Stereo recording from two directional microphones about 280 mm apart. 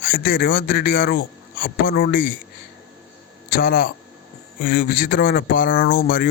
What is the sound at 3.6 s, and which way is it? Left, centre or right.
Speech, left.